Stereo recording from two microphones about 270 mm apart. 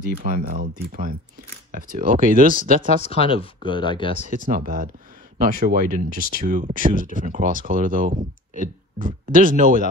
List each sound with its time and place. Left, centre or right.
0.2 s speech: right
1.7 s speech: right
2.9 s speech: left
4.5 s speech: right